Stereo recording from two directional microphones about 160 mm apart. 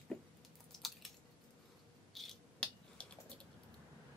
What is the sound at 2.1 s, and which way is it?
Finger snapping, centre (ahead or behind).